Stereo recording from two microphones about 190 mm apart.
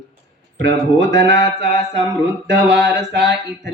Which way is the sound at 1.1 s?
70° right (ahead or behind).